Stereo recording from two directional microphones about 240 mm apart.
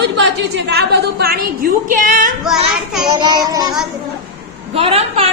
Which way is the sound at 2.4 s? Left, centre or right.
Centre.